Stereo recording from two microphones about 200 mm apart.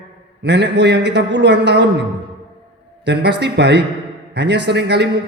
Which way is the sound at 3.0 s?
60° right (ahead or behind).